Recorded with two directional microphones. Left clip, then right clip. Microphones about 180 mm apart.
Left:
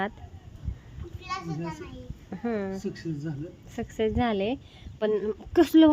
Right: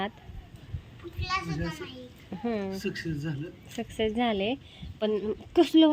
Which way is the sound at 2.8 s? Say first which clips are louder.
Right 1 dB; 20° left (ahead or behind).